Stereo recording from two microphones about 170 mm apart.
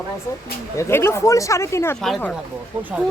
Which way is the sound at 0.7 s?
15° left (ahead or behind).